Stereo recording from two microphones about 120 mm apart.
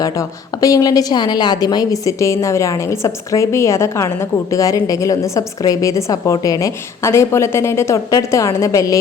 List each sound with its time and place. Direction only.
0.0 s a woman's voice: 30° left (ahead or behind)